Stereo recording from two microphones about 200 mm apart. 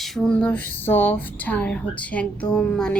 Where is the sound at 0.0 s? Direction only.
5° left (ahead or behind).